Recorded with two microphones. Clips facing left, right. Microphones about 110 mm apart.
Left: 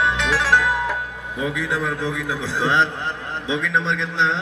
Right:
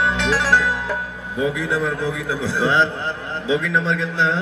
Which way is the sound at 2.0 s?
20° left (ahead or behind).